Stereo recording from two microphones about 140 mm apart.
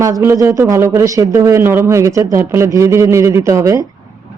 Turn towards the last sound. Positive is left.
turn(degrees=-25)  # may be behind; listen again after turning